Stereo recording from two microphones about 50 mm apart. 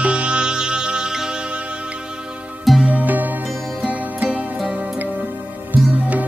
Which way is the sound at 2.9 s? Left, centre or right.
Right.